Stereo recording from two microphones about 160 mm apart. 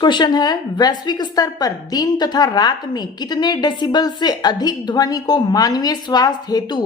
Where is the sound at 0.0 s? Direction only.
30° left (ahead or behind).